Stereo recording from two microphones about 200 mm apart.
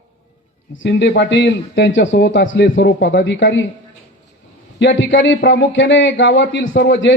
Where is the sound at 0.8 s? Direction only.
65° left (ahead or behind).